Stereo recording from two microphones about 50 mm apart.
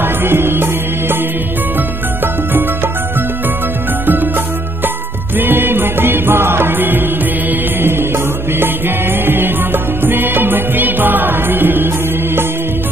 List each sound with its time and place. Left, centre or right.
0.0 s music: right
4.0 s music: right
5.4 s music: right
8.5 s music: right